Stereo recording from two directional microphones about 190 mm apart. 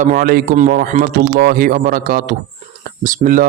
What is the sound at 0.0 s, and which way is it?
Speech, 45° right (ahead or behind).